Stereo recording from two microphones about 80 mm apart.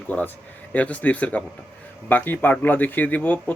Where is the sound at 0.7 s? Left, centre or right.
Centre.